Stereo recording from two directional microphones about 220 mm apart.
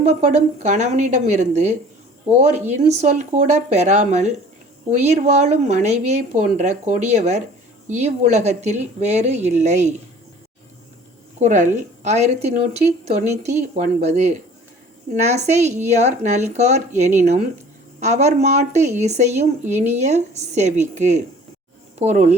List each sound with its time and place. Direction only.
0.0 s speech: 30° right (ahead or behind)
11.3 s speech: 35° right (ahead or behind)